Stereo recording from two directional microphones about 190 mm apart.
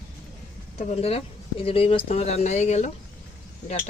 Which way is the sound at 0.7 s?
30° left (ahead or behind).